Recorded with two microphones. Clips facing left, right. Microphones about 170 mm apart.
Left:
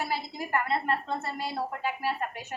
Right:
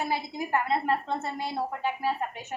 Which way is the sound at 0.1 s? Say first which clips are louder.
Right 2 dB; 20° right (ahead or behind).